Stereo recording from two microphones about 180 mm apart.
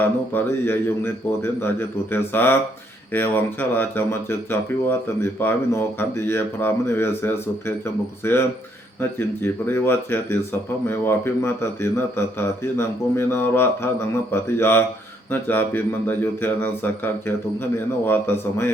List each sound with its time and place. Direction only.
0.0 s speech: 10° left (ahead or behind)